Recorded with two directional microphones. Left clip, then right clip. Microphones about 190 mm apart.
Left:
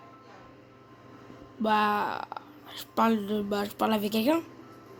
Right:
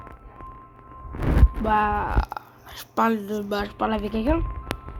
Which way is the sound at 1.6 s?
Centre (ahead or behind).